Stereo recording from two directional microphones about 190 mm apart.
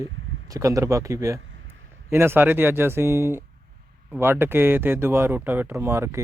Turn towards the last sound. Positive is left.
turn(degrees=-15)  # may be behind; listen again after turning